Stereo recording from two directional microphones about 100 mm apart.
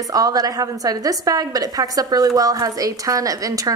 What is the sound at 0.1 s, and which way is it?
A woman's voice, 40° right (ahead or behind).